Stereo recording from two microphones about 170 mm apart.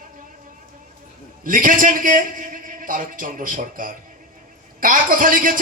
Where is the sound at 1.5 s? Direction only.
55° right (ahead or behind).